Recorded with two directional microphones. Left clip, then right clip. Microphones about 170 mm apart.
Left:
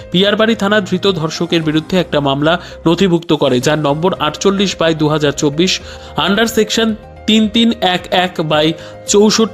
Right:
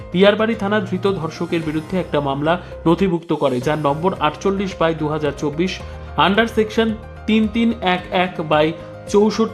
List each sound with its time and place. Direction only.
0.1 s speech: 30° left (ahead or behind)